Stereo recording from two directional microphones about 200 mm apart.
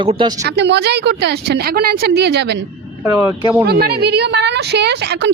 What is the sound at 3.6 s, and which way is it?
A woman's voice, 55° right (ahead or behind).